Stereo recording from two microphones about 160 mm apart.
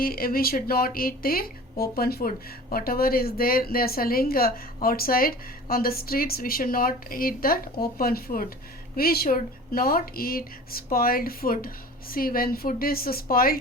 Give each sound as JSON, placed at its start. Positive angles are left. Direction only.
{"t": 0.0, "sound": "speech", "side_deg": 65}